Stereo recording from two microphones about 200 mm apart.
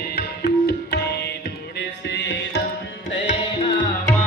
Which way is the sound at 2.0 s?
60° left (ahead or behind).